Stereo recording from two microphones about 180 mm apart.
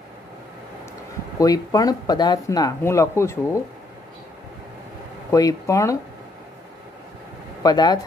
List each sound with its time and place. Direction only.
1.4 s speech: 20° left (ahead or behind)
5.3 s speech: 20° left (ahead or behind)
7.6 s speech: 20° left (ahead or behind)